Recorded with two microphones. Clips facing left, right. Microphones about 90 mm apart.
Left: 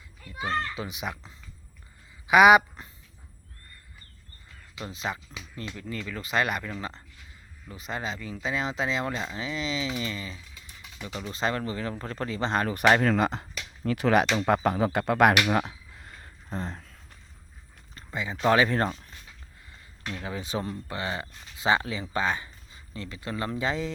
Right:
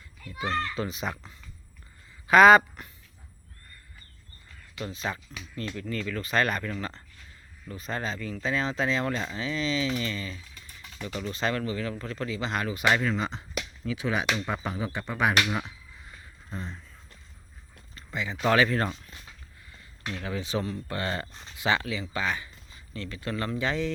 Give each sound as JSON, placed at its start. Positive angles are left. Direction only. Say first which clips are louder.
{"t": 0.3, "sound": "a child's voice", "louder": "even", "side_deg": 10}
{"t": 2.2, "sound": "speech", "louder": "right 1 dB", "side_deg": 10}
{"t": 4.8, "sound": "speech", "louder": "even", "side_deg": 20}
{"t": 12.7, "sound": "speech", "louder": "left 4 dB", "side_deg": 50}
{"t": 15.6, "sound": "a sound", "louder": "left 3 dB", "side_deg": 45}
{"t": 16.5, "sound": "speech", "louder": "left 4 dB", "side_deg": 35}
{"t": 17.9, "sound": "rowboat", "louder": "even", "side_deg": 30}
{"t": 18.4, "sound": "speech", "louder": "left 1 dB", "side_deg": 25}
{"t": 20.1, "sound": "speech", "louder": "right 1 dB", "side_deg": 25}
{"t": 21.6, "sound": "speech", "louder": "left 2 dB", "side_deg": 30}